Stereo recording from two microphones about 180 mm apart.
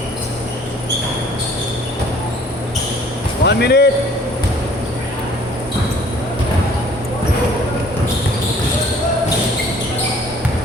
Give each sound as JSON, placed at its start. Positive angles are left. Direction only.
{"t": 3.4, "sound": "speech", "side_deg": 65}